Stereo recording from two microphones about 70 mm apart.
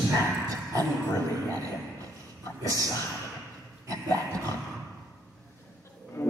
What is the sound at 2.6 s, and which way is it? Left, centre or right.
Speech, right.